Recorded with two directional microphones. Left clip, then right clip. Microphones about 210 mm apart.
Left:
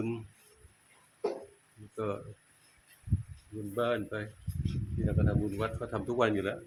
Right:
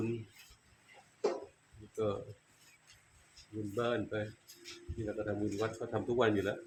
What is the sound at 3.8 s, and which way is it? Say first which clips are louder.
Speech: left 3 dB; 35° left (ahead or behind).